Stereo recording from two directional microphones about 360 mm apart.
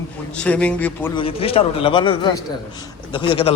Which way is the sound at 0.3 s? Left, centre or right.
Centre.